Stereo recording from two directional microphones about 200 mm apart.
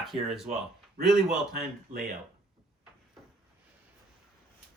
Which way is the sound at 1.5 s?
45° right (ahead or behind).